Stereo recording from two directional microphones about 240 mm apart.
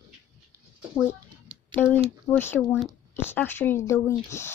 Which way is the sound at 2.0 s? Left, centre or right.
Centre.